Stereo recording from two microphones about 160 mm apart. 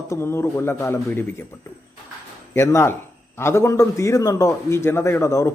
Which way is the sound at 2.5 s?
15° left (ahead or behind).